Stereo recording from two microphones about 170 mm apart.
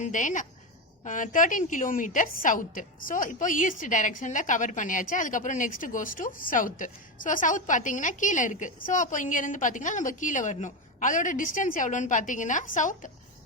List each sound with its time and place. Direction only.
0.0 s a woman's voice: 45° left (ahead or behind)